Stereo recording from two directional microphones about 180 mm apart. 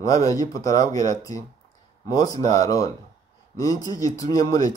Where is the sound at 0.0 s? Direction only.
20° left (ahead or behind).